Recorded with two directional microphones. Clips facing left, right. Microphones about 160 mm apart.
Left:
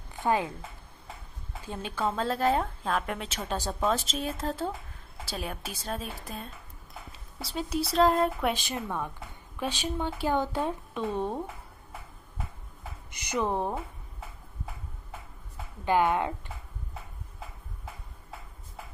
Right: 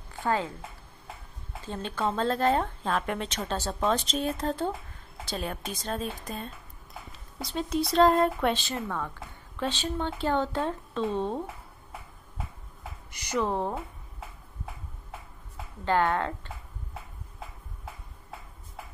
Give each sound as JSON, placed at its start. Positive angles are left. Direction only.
{"t": 0.1, "sound": "a sound", "side_deg": 15}
{"t": 1.7, "sound": "a woman's voice", "side_deg": 10}
{"t": 13.1, "sound": "speech", "side_deg": 20}
{"t": 15.8, "sound": "speech", "side_deg": 15}